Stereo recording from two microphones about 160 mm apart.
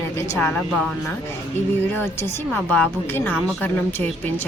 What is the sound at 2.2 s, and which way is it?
Speech, 10° left (ahead or behind).